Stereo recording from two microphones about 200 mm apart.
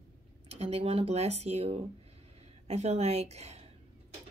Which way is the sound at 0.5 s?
30° right (ahead or behind).